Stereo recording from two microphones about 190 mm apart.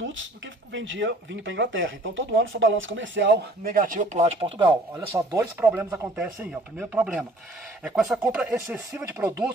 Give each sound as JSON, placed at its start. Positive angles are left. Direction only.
{"t": 0.0, "sound": "speech", "side_deg": -85}
{"t": 5.8, "sound": "chopping", "side_deg": -10}
{"t": 7.8, "sound": "speech", "side_deg": 0}